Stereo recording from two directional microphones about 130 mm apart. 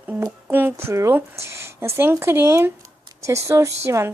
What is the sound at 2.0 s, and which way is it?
Speech, 20° right (ahead or behind).